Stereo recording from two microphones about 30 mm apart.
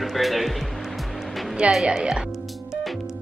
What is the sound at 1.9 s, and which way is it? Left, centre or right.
Speech, right.